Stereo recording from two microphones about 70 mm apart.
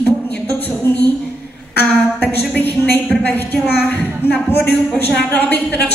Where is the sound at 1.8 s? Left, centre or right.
Left.